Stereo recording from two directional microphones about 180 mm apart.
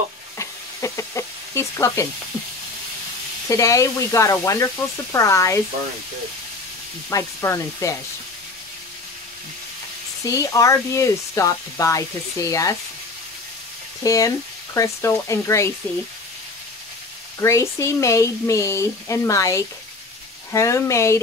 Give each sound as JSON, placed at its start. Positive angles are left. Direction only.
{"t": 0.4, "sound": "sizzle", "side_deg": 15}
{"t": 3.4, "sound": "speech", "side_deg": 15}
{"t": 7.1, "sound": "speech", "side_deg": 15}
{"t": 10.2, "sound": "speech", "side_deg": 20}
{"t": 14.0, "sound": "speech", "side_deg": 20}
{"t": 17.4, "sound": "speech", "side_deg": 15}